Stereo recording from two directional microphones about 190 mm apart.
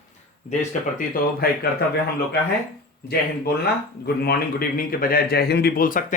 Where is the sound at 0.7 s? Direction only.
50° left (ahead or behind).